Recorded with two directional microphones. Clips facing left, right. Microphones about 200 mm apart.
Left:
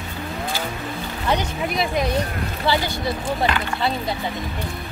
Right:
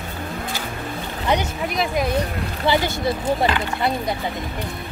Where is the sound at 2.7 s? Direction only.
20° right (ahead or behind).